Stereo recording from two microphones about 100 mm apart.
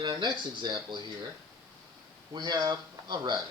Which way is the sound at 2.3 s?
45° right (ahead or behind).